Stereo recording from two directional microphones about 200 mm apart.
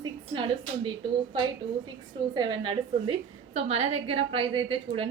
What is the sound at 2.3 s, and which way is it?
A woman's voice, 20° right (ahead or behind).